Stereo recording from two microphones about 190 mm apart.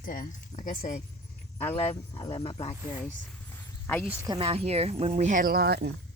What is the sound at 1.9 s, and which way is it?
Speech, 30° left (ahead or behind).